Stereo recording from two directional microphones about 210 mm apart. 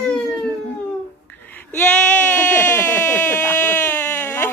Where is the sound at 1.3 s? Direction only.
10° left (ahead or behind).